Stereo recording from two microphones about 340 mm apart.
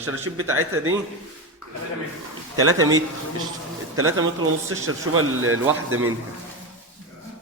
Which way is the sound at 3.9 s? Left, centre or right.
Right.